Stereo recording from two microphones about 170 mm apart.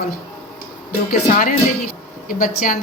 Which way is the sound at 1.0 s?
50° left (ahead or behind).